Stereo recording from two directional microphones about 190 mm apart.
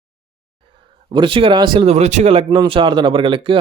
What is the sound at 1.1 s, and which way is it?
Speech, 25° right (ahead or behind).